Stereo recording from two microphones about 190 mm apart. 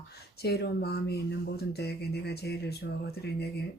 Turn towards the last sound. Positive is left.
turn(degrees=60)  # may be behind; listen again after turning